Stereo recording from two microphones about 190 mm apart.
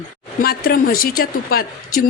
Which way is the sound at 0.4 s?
50° left (ahead or behind).